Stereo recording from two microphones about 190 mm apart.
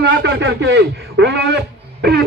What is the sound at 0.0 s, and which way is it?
A man's voice, 65° right (ahead or behind).